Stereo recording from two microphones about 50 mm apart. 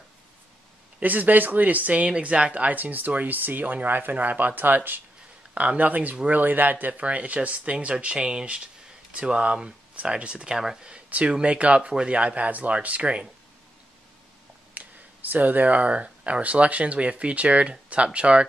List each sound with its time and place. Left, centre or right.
0.9 s speech: right
14.7 s speech: right